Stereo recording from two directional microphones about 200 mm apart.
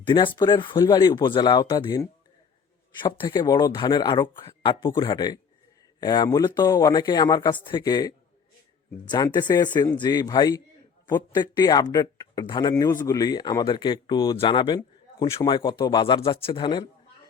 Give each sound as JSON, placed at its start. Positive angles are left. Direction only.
{"t": 0.1, "sound": "speech", "side_deg": 25}